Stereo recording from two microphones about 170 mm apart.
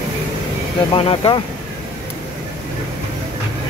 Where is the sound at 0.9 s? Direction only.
30° left (ahead or behind).